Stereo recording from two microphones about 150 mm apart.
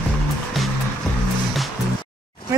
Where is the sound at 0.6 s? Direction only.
Centre (ahead or behind).